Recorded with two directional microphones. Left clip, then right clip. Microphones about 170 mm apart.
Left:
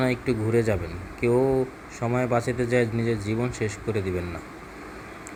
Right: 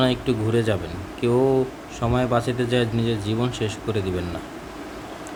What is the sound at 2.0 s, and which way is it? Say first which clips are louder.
Speech: right 3 dB; centre (ahead or behind).